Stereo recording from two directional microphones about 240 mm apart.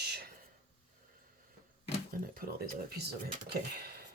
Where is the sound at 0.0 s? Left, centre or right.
Right.